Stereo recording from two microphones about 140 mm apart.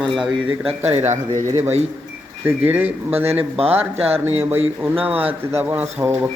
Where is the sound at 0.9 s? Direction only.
55° right (ahead or behind).